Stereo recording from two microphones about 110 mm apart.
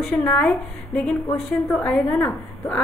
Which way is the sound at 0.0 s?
10° left (ahead or behind).